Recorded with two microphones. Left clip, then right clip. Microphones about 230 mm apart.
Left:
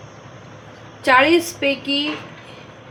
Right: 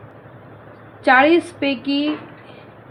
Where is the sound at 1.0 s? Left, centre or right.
Right.